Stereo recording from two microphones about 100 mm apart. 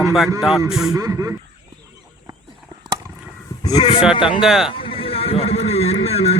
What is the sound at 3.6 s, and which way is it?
Speech, 40° left (ahead or behind).